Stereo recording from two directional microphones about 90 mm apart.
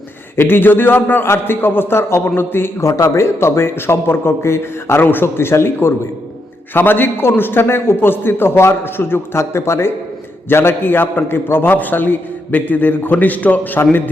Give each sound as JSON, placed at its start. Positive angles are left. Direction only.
{"t": 0.3, "sound": "a man's voice", "side_deg": 25}